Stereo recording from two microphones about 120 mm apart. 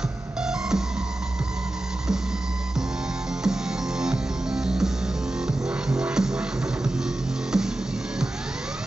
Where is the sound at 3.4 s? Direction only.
5° right (ahead or behind).